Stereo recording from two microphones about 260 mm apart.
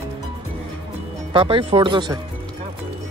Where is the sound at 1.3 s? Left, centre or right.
Centre.